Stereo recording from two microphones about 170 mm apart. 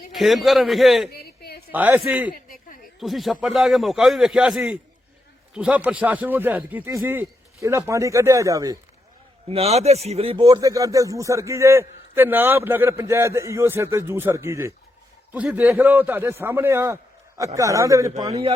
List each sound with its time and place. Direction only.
0.1 s a man's voice: centre (ahead or behind)
1.1 s a sound: 65° left (ahead or behind)
1.7 s a man's voice: 10° right (ahead or behind)
2.3 s a sound: 60° left (ahead or behind)
3.0 s a man's voice: centre (ahead or behind); by 8.8 s 20° right (ahead or behind)
9.5 s a man's voice: 35° right (ahead or behind); by 18.1 s 20° right (ahead or behind)
18.3 s a man's voice: 35° right (ahead or behind)